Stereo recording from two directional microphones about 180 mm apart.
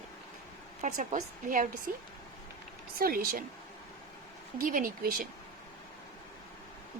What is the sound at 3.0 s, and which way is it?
Speech, 55° right (ahead or behind).